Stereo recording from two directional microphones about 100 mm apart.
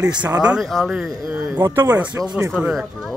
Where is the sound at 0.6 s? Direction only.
Centre (ahead or behind).